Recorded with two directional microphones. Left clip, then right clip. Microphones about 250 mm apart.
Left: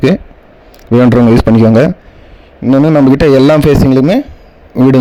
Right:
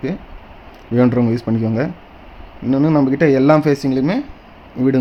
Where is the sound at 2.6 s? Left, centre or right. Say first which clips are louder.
Left 8 dB; left.